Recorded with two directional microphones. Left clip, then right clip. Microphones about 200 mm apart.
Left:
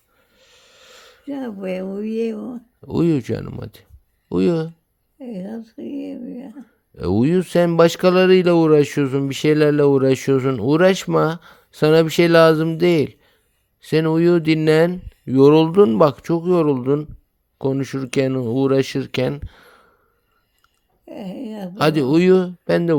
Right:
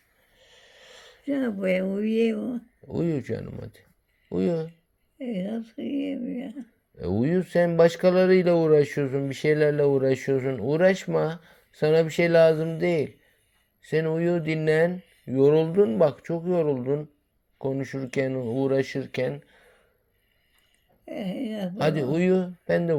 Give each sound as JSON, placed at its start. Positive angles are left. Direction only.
{"t": 0.3, "sound": "snort", "side_deg": 25}
{"t": 1.2, "sound": "speech", "side_deg": 10}
{"t": 1.7, "sound": "speech", "side_deg": 20}
{"t": 3.0, "sound": "speech", "side_deg": 45}
{"t": 5.2, "sound": "speech", "side_deg": 30}
{"t": 6.6, "sound": "speech", "side_deg": 45}
{"t": 13.9, "sound": "speech", "side_deg": 55}
{"t": 21.0, "sound": "a sound", "side_deg": 30}
{"t": 21.7, "sound": "speech", "side_deg": 50}